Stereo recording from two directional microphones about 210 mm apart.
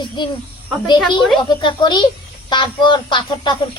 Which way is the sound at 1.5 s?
20° left (ahead or behind).